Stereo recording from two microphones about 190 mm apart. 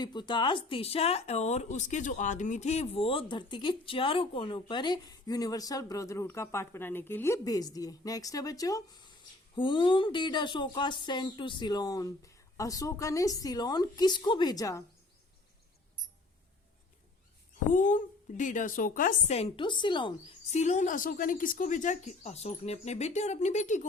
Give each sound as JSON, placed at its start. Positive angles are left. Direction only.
{"t": 0.0, "sound": "speech", "side_deg": 25}
{"t": 17.7, "sound": "speech", "side_deg": 45}
{"t": 19.4, "sound": "a woman's voice", "side_deg": 25}